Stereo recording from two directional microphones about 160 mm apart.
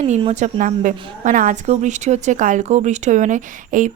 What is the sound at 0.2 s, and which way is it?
A woman's voice, 45° right (ahead or behind).